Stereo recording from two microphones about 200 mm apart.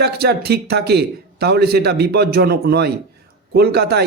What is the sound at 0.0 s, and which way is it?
A man's voice, 55° right (ahead or behind).